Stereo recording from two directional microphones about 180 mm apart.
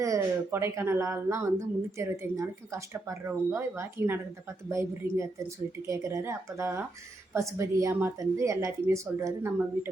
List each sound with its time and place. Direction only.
0.0 s speech: 15° right (ahead or behind)